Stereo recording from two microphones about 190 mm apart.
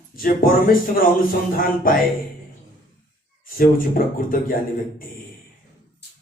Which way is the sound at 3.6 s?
50° left (ahead or behind).